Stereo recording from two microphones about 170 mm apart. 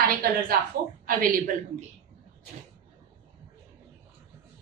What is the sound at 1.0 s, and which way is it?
Speech, 50° right (ahead or behind).